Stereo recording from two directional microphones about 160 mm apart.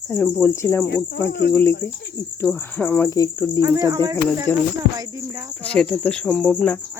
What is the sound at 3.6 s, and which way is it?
Speech, 25° right (ahead or behind).